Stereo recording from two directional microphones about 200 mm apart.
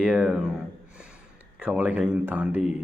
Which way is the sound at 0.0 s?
5° right (ahead or behind).